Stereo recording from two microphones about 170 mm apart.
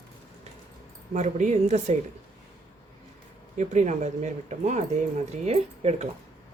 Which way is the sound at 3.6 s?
45° right (ahead or behind).